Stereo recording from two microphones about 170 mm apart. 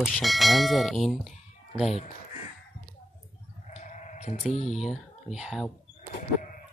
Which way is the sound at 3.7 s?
45° left (ahead or behind).